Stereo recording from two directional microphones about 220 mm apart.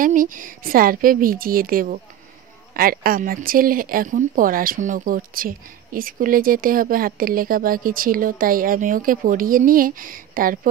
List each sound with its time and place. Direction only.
0.0 s speech: 35° right (ahead or behind)